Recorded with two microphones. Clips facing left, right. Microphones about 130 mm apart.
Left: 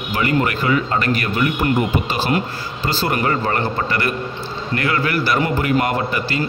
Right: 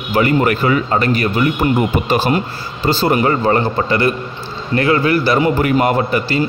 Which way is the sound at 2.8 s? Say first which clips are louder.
Right 6 dB; 25° right (ahead or behind).